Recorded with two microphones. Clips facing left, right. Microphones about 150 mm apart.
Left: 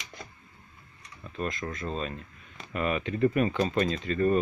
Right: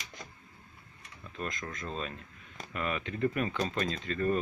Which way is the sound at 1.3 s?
5° left (ahead or behind).